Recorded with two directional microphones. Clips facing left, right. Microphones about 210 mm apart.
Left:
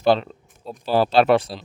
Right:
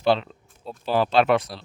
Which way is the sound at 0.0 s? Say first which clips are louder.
Left 3 dB; 45° left (ahead or behind).